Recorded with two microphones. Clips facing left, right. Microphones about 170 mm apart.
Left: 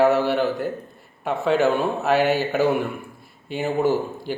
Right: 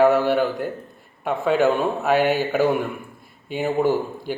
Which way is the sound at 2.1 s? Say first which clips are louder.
Even; 50° right (ahead or behind).